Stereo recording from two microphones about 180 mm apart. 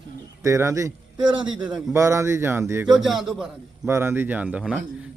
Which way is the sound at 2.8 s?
Centre (ahead or behind).